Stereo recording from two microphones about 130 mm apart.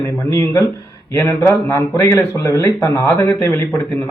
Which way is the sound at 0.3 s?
25° left (ahead or behind).